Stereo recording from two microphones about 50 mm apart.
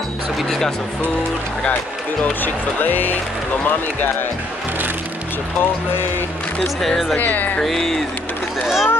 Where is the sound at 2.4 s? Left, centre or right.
Left.